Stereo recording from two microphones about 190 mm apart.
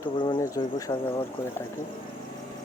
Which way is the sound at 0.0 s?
20° left (ahead or behind).